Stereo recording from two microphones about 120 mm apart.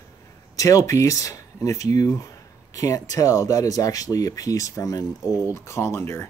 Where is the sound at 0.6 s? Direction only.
25° left (ahead or behind).